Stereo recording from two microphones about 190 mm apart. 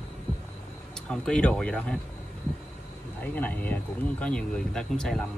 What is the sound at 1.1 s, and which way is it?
Speech, 5° left (ahead or behind).